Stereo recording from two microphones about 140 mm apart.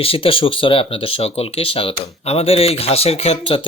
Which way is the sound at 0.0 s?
40° left (ahead or behind).